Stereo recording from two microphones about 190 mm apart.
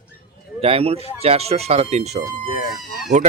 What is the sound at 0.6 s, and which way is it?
Speech, 30° right (ahead or behind).